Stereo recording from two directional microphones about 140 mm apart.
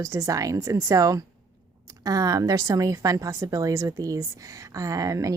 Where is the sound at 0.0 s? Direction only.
25° right (ahead or behind).